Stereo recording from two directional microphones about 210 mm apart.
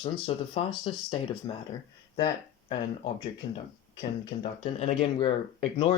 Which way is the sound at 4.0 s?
25° left (ahead or behind).